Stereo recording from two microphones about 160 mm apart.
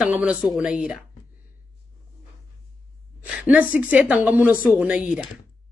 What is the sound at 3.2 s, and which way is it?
Speech, 10° right (ahead or behind).